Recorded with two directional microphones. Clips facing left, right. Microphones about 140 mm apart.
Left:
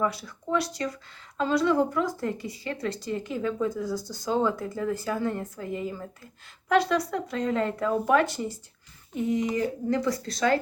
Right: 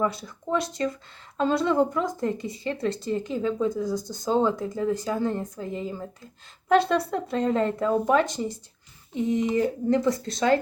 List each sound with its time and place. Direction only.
0.0 s speech: 25° right (ahead or behind)